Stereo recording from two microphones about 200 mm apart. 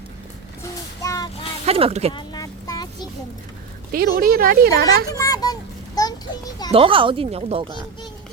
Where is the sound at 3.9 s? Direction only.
50° right (ahead or behind).